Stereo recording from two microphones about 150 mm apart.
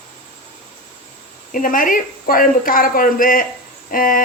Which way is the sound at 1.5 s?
65° left (ahead or behind).